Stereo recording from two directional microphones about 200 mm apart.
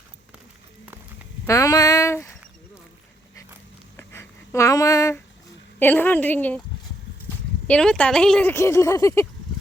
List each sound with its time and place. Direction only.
1.5 s speech: 15° left (ahead or behind)
3.9 s a sound: 15° left (ahead or behind)
5.8 s speech: 10° left (ahead or behind)
7.7 s speech: 5° left (ahead or behind)